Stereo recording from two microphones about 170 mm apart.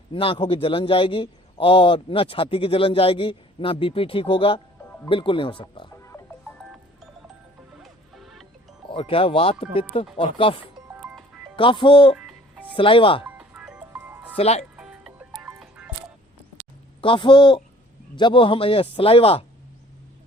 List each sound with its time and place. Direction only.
0.1 s a man's voice: 30° left (ahead or behind)
7.8 s music: centre (ahead or behind)
8.9 s a man's voice: 30° left (ahead or behind)
12.1 s music: centre (ahead or behind)
12.7 s a man's voice: 30° left (ahead or behind)
13.2 s music: 10° right (ahead or behind)
14.3 s a man's voice: 35° left (ahead or behind)
14.8 s music: 5° right (ahead or behind)
17.0 s a man's voice: 30° left (ahead or behind)